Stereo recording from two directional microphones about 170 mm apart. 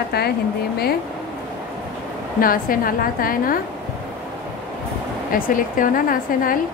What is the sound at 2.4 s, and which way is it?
Speech, 55° left (ahead or behind).